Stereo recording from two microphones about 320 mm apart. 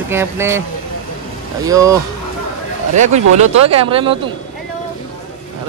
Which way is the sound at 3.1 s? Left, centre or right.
Right.